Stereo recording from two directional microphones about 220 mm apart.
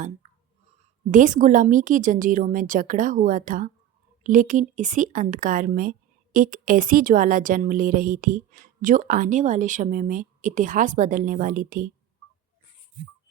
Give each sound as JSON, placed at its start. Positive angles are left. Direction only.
{"t": 1.1, "sound": "speech", "side_deg": -35}